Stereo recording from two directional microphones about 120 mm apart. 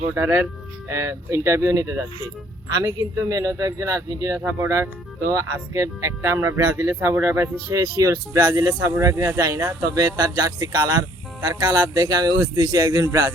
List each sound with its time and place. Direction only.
0.2 s speech: 20° right (ahead or behind)